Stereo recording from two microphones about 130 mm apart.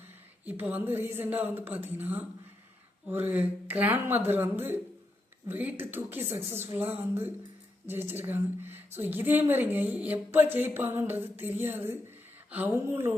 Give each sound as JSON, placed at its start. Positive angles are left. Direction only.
{"t": 0.4, "sound": "a woman's voice", "side_deg": -10}